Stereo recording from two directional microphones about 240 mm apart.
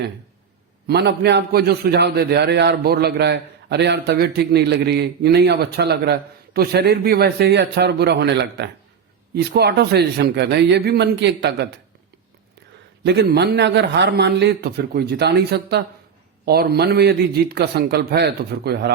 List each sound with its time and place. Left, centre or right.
0.9 s a man's voice: right
13.1 s a man's voice: right